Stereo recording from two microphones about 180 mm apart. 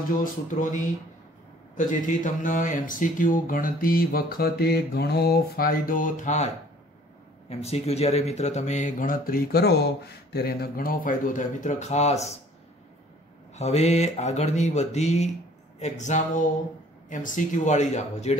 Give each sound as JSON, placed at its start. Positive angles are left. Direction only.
{"t": 0.1, "sound": "speech", "side_deg": 50}
{"t": 13.6, "sound": "speech", "side_deg": 40}